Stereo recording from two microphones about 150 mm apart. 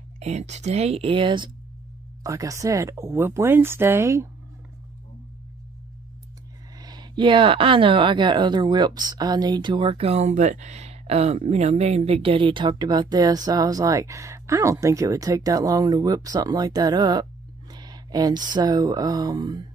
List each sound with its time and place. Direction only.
0.2 s speech: 50° right (ahead or behind); by 1.5 s 30° right (ahead or behind)
2.2 s speech: 20° right (ahead or behind)
6.8 s speech: 30° right (ahead or behind)